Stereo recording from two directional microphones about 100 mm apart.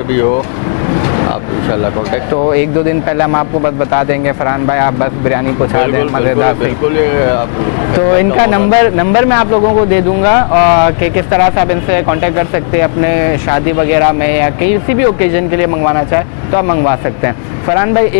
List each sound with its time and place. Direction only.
3.1 s speech: 20° left (ahead or behind)
4.5 s speech: 20° left (ahead or behind)
7.9 s speech: 25° left (ahead or behind)
13.5 s speech: 20° left (ahead or behind)
16.5 s speech: 25° left (ahead or behind)